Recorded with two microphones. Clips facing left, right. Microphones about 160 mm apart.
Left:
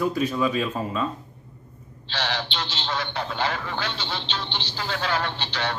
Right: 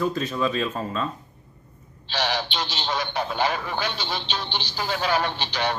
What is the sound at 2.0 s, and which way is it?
A man's voice, 15° right (ahead or behind).